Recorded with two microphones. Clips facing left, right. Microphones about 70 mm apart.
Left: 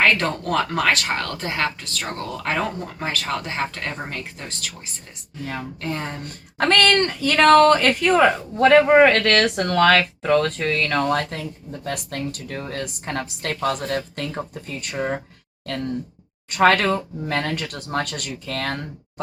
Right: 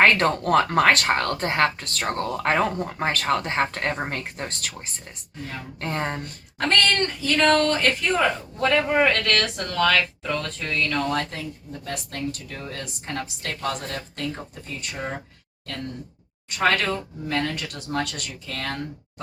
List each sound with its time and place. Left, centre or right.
0.0 s speech: right
2.0 s speech: right
5.8 s speech: right
6.6 s speech: left
8.9 s speech: left
9.2 s speech: left
14.9 s speech: left
16.5 s speech: left